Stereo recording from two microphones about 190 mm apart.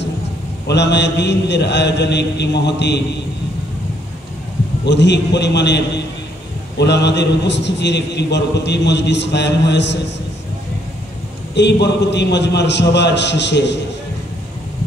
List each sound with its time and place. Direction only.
0.7 s a man's voice: 65° left (ahead or behind)
4.8 s a man's voice: 65° left (ahead or behind)
6.9 s a man's voice: 65° left (ahead or behind)
11.5 s a man's voice: 65° left (ahead or behind)